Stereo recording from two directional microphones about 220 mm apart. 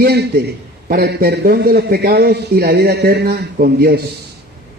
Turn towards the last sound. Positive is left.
turn(degrees=-45)  # may be behind; listen again after turning